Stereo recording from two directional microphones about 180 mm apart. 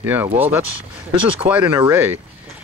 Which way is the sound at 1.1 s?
30° right (ahead or behind).